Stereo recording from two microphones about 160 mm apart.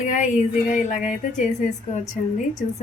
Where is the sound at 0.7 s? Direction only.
50° left (ahead or behind).